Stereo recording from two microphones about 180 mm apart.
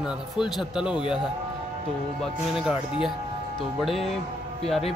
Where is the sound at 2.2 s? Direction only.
Centre (ahead or behind).